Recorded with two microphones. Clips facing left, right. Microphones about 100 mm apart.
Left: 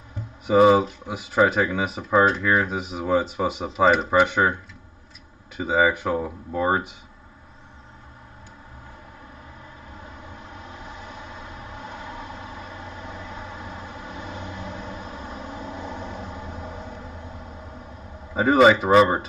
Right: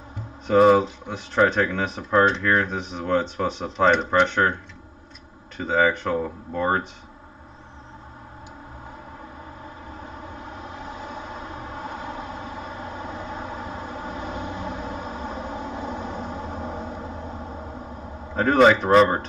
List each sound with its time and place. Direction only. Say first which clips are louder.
0.5 s speech: even; 5° left (ahead or behind)
5.6 s speech: even; 5° left (ahead or behind)
13.9 s vehicle: right 4 dB; 35° right (ahead or behind)
18.3 s speech: left 1 dB; 5° left (ahead or behind)